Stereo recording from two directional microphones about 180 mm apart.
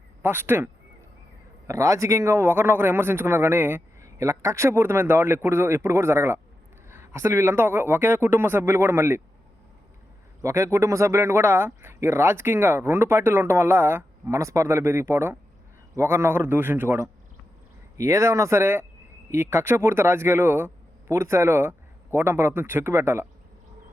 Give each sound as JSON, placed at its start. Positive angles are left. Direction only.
{"t": 0.2, "sound": "speech", "side_deg": -10}
{"t": 10.4, "sound": "speech", "side_deg": -15}